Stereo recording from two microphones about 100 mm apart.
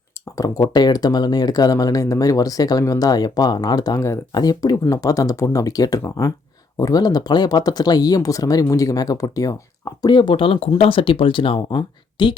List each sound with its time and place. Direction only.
0.3 s speech: 35° left (ahead or behind)
10.0 s a woman's voice: 50° left (ahead or behind)